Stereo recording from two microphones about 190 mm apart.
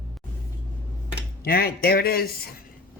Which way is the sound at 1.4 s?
55° left (ahead or behind).